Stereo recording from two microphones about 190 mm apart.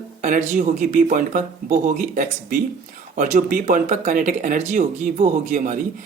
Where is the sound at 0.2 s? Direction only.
45° right (ahead or behind).